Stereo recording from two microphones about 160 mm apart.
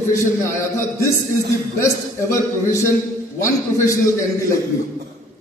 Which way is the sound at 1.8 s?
20° left (ahead or behind).